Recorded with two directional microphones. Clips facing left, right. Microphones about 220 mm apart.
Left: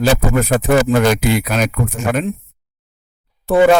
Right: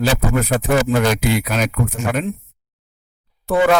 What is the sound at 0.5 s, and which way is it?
Speech, 50° left (ahead or behind).